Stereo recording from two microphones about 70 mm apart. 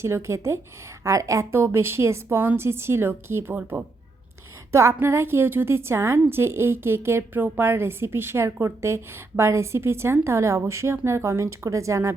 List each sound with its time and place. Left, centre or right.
0.0 s a woman's voice: right
3.6 s a woman's voice: right
4.7 s a woman's voice: right